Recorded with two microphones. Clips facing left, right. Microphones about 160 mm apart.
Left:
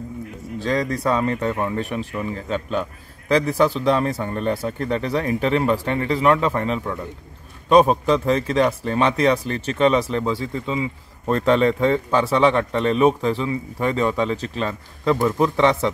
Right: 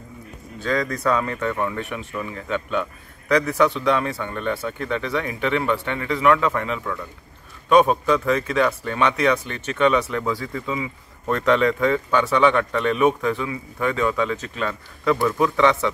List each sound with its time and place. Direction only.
0.6 s speech: 30° left (ahead or behind)